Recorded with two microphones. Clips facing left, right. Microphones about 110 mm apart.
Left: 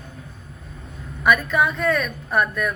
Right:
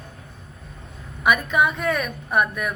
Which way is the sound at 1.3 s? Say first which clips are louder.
Left 1 dB; 15° right (ahead or behind).